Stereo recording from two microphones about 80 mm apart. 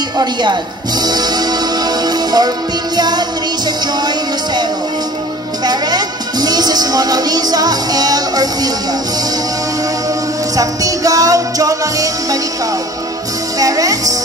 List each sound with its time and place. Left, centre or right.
0.2 s music: right
5.7 s speech: right
10.5 s music: right
13.6 s music: right